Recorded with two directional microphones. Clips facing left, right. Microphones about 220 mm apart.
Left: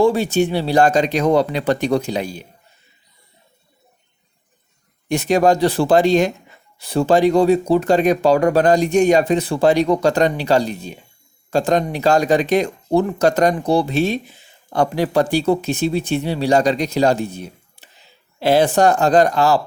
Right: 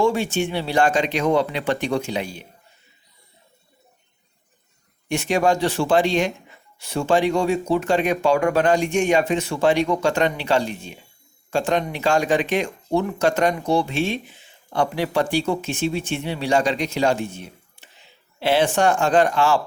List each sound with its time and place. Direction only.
0.0 s speech: 35° left (ahead or behind)
5.0 s speech: 40° left (ahead or behind)